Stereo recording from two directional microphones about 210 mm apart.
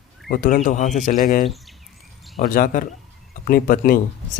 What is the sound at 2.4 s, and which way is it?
Speech, 40° left (ahead or behind).